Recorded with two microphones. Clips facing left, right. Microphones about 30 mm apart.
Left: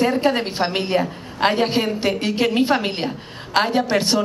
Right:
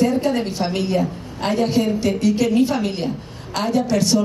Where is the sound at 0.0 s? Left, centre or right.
Left.